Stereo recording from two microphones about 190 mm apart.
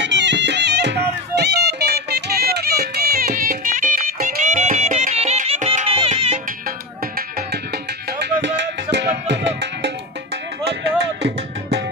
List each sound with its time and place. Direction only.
0.0 s music: 70° right (ahead or behind); by 6.4 s 35° right (ahead or behind)
8.2 s music: 65° right (ahead or behind)